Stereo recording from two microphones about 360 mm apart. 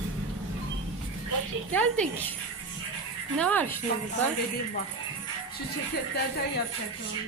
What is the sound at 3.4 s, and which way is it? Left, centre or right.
Speech, centre.